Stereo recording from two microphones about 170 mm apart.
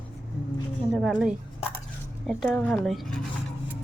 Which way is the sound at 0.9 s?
Centre (ahead or behind).